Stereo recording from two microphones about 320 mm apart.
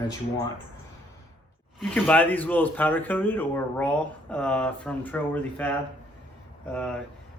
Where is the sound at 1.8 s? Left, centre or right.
Centre.